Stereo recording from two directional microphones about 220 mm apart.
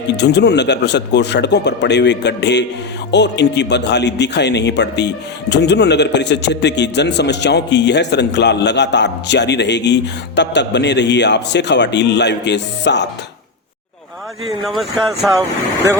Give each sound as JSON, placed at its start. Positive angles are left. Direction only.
{"t": 0.2, "sound": "a man's voice", "side_deg": 50}
{"t": 14.6, "sound": "speech", "side_deg": 0}